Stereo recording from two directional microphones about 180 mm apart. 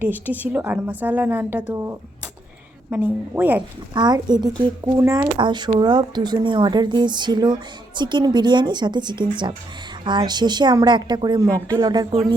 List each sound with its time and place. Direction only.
0.0 s a woman's voice: 10° right (ahead or behind)
3.9 s speech: 25° right (ahead or behind)